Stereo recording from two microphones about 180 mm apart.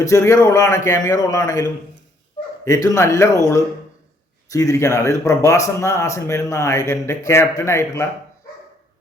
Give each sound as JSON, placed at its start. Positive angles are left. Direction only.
{"t": 0.0, "sound": "speech", "side_deg": 15}
{"t": 2.6, "sound": "speech", "side_deg": 15}
{"t": 4.4, "sound": "speech", "side_deg": 20}